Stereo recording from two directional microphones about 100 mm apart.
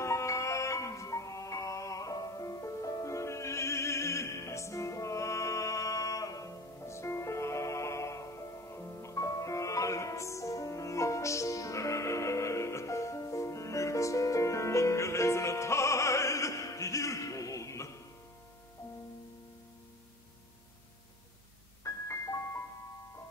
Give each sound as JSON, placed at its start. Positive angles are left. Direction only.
{"t": 0.0, "sound": "music", "side_deg": 30}
{"t": 21.8, "sound": "music", "side_deg": 30}